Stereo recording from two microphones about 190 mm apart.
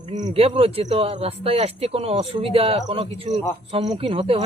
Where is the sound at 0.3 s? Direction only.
30° right (ahead or behind).